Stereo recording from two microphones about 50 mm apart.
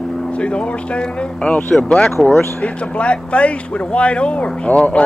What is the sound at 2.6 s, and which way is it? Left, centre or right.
Speech, left.